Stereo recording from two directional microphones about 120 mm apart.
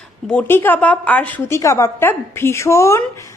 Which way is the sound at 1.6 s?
25° left (ahead or behind).